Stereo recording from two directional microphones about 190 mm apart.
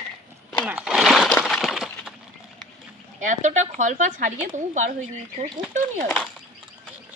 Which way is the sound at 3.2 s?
40° right (ahead or behind).